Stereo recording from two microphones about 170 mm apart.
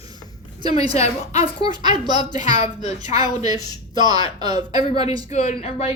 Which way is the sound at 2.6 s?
40° left (ahead or behind).